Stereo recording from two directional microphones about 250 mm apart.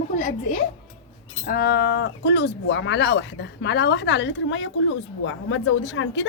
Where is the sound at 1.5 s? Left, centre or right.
Left.